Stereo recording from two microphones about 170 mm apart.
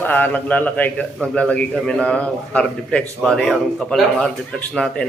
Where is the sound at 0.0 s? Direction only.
10° left (ahead or behind).